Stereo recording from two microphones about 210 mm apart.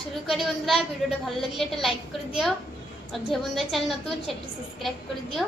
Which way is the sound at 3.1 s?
Centre (ahead or behind).